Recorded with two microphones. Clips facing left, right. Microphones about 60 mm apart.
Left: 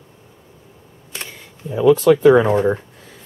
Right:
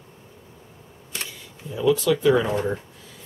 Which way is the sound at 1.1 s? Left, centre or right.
Left.